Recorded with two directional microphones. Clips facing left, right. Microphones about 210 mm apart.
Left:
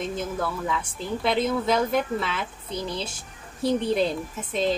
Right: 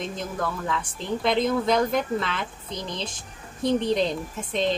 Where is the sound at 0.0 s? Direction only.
5° left (ahead or behind).